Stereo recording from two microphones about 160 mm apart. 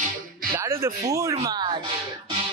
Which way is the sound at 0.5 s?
15° right (ahead or behind).